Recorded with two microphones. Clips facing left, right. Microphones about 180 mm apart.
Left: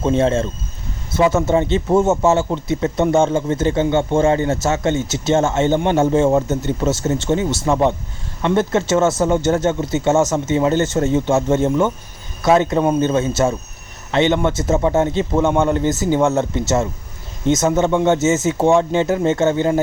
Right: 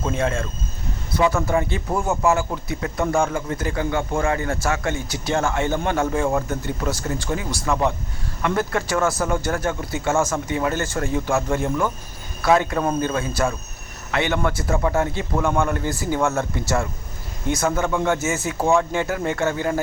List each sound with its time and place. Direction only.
0.0 s speech: 25° left (ahead or behind)